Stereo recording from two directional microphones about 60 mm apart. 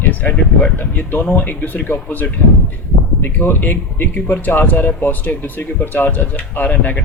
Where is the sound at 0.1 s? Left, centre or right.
Left.